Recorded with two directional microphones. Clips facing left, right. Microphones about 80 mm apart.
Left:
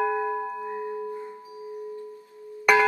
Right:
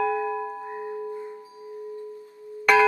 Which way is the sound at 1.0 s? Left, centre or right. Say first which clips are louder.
Even; left.